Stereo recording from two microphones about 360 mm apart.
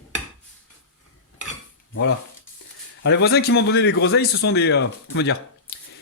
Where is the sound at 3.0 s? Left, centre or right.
Left.